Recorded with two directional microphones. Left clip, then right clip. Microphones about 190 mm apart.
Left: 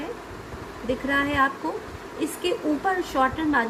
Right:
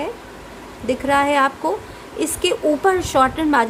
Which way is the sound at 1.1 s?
60° right (ahead or behind).